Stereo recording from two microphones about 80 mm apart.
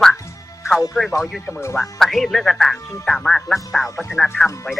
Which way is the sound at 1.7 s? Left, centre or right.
Centre.